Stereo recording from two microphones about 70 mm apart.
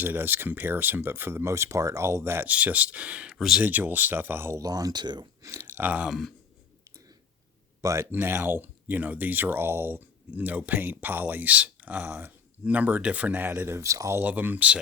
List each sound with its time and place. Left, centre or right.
0.0 s speech: right
2.5 s speech: right
3.3 s speech: centre
3.6 s speech: right
4.6 s speech: right
5.4 s a sound: right
5.7 s speech: right
6.1 s speech: centre
6.8 s a sound: right
7.8 s speech: right
8.1 s speech: right
14.2 s speech: right